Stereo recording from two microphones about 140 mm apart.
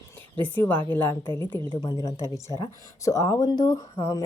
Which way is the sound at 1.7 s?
30° left (ahead or behind).